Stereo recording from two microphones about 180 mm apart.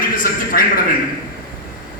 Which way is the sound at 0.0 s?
50° left (ahead or behind).